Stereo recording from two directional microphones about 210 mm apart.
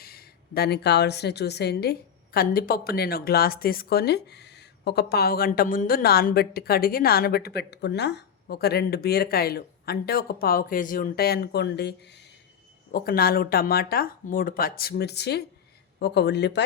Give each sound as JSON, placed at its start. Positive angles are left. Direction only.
{"t": 0.0, "sound": "a woman's voice", "side_deg": 45}